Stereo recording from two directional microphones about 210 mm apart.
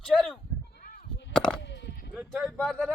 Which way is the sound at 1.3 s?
5° left (ahead or behind).